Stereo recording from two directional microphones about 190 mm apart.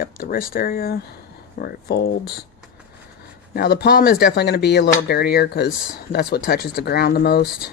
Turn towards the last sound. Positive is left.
turn(degrees=55)  # may be behind; listen again after turning